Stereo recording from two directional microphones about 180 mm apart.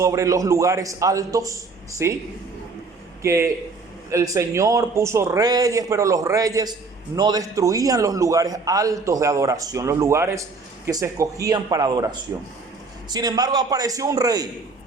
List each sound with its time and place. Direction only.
0.0 s a man's voice: 15° right (ahead or behind)
3.2 s a man's voice: 15° right (ahead or behind)
13.1 s a man's voice: 20° right (ahead or behind)